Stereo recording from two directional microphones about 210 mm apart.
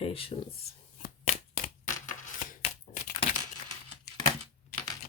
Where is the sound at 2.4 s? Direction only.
40° left (ahead or behind).